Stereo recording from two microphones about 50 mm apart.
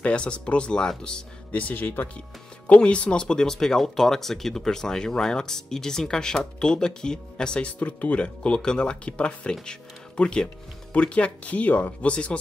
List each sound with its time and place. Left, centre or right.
0.0 s speech: left
1.5 s speech: left
2.6 s speech: left
7.6 s speech: left